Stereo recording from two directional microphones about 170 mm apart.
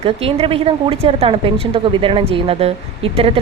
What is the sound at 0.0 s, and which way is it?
Speech, 35° right (ahead or behind).